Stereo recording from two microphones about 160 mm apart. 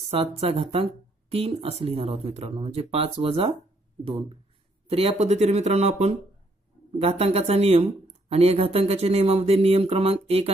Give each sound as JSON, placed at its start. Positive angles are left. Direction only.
{"t": 0.1, "sound": "speech", "side_deg": -40}
{"t": 4.8, "sound": "speech", "side_deg": -40}